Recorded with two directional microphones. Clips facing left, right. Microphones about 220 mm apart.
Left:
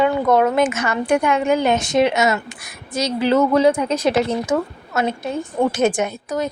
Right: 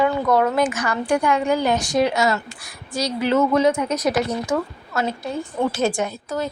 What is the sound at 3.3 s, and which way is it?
A woman's voice, 35° left (ahead or behind).